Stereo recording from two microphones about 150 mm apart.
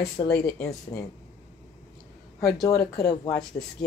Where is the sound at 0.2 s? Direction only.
25° left (ahead or behind).